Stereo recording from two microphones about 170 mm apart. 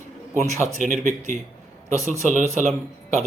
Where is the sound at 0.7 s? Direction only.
45° right (ahead or behind).